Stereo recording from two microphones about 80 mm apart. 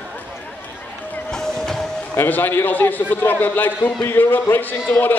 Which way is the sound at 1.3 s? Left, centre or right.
Centre.